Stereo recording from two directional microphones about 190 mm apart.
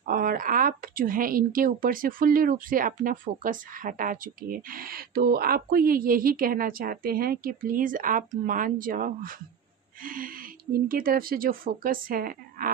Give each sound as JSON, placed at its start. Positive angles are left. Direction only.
{"t": 0.1, "sound": "speech", "side_deg": -45}